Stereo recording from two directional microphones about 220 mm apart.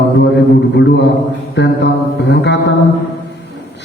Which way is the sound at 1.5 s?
50° left (ahead or behind).